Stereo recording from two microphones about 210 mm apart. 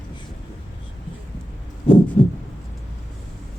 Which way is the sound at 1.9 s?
25° left (ahead or behind).